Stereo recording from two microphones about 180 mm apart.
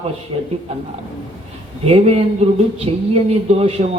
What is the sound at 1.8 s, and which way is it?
A man's voice, 35° right (ahead or behind).